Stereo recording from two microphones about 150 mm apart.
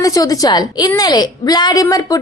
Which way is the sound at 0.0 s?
25° left (ahead or behind).